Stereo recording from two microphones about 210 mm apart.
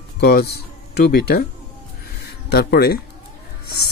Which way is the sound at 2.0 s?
50° left (ahead or behind).